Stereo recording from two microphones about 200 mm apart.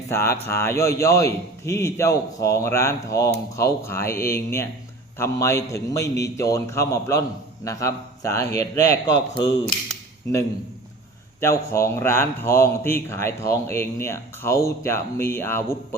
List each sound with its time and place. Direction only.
0.1 s speech: 15° left (ahead or behind)
11.3 s speech: 15° left (ahead or behind)